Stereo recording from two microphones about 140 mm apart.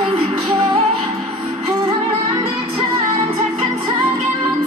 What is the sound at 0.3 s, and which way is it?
Music, 35° right (ahead or behind).